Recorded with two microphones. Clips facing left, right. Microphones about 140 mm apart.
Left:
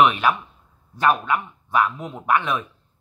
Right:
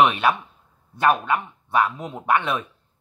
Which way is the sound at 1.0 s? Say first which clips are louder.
Even; 30° right (ahead or behind).